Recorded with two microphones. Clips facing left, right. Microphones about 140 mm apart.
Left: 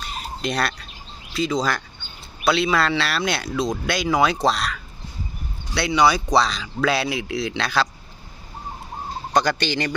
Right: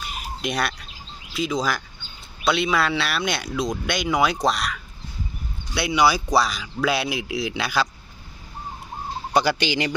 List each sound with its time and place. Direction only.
0.0 s chicken: 5° right (ahead or behind)
1.3 s speech: centre (ahead or behind)
9.3 s speech: 10° right (ahead or behind)